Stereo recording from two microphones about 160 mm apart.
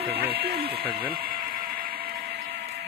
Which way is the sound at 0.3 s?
80° right.